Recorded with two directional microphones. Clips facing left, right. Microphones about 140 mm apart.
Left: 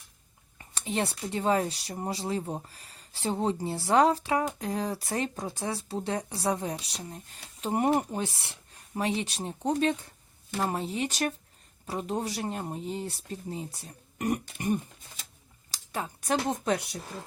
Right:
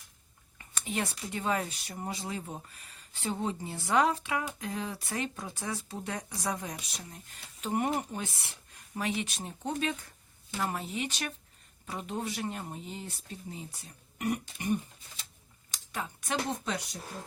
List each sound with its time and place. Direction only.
0.6 s speech: 30° left (ahead or behind)
15.7 s speech: 35° left (ahead or behind); by 17.0 s 55° left (ahead or behind)